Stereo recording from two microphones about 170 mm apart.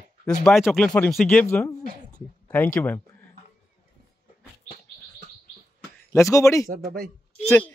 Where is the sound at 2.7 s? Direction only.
10° left (ahead or behind).